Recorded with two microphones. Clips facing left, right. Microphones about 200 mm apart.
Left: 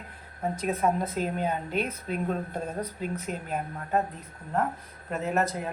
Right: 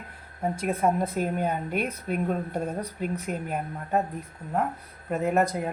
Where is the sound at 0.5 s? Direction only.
10° right (ahead or behind).